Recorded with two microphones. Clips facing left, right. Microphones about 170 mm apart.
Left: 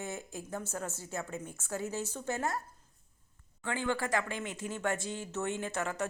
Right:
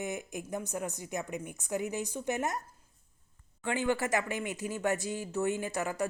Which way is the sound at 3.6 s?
15° right (ahead or behind).